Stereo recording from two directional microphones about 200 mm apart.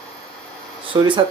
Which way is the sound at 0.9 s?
20° right (ahead or behind).